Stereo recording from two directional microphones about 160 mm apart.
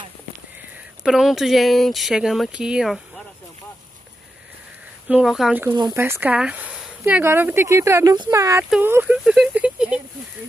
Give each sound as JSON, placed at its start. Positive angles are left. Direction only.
{"t": 1.0, "sound": "speech", "side_deg": 0}
{"t": 5.0, "sound": "speech", "side_deg": -5}
{"t": 5.9, "sound": "speech", "side_deg": -15}